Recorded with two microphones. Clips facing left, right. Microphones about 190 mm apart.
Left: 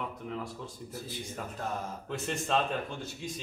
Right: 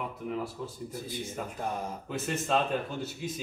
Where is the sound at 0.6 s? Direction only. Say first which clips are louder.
Right 5 dB; 5° right (ahead or behind).